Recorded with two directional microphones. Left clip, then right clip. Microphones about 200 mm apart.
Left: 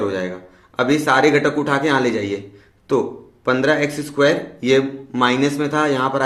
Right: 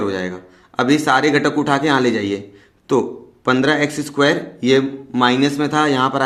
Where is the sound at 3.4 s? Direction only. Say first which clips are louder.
Right 1 dB; 35° right (ahead or behind).